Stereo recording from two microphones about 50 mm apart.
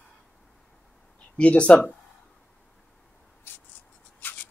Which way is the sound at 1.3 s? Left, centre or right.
Left.